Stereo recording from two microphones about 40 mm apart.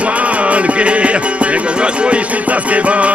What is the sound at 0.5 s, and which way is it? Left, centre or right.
Music, right.